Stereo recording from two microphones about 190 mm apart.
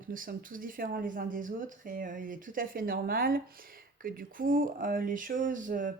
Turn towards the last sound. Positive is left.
turn(degrees=-45)  # may be behind; listen again after turning